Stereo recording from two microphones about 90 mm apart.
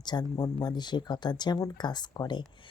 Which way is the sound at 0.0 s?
55° left (ahead or behind).